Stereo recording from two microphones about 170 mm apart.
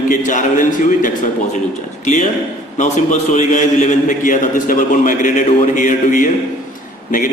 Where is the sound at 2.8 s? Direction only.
45° left (ahead or behind).